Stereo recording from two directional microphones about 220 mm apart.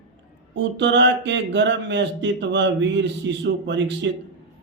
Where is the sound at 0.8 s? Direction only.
55° right (ahead or behind).